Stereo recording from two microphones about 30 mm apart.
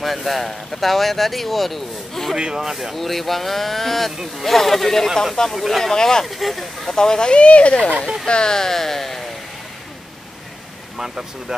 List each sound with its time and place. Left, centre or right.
0.0 s speech: centre
2.3 s speech: right
2.7 s speech: centre
3.0 s speech: centre
5.9 s speech: centre
6.2 s speech: centre
7.0 s speech: left
7.3 s speech: left
8.3 s speech: left
8.5 s speech: centre
11.0 s speech: centre